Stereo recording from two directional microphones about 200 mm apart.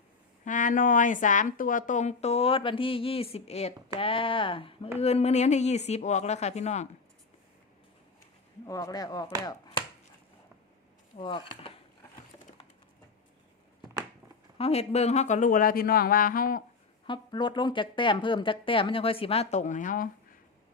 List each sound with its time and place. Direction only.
0.4 s a woman's voice: 40° left (ahead or behind)
8.6 s speech: 15° left (ahead or behind)
9.4 s chopping: 20° left (ahead or behind)
11.2 s speech: 25° left (ahead or behind)
14.6 s speech: 30° left (ahead or behind)
17.1 s speech: 25° left (ahead or behind); by 20.1 s 40° left (ahead or behind)